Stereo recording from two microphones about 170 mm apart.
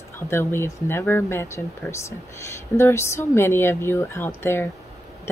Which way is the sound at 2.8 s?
15° left (ahead or behind).